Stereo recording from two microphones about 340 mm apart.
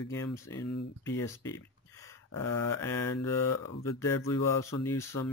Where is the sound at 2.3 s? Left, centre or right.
Centre.